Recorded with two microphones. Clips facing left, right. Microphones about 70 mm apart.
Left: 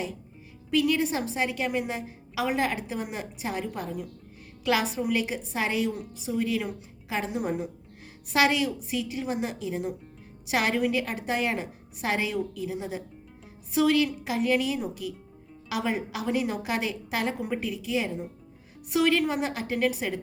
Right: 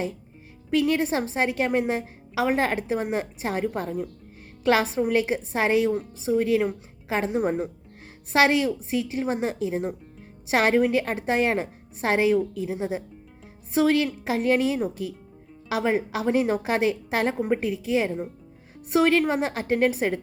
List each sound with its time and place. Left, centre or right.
0.7 s a woman's voice: right